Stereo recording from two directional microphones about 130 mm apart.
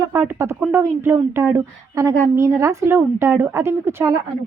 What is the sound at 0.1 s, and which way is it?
A woman's voice, 20° right (ahead or behind).